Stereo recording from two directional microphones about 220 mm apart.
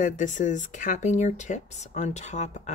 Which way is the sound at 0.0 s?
35° left (ahead or behind).